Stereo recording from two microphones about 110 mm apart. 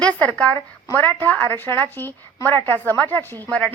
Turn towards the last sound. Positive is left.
turn(degrees=10)  # may be behind; listen again after turning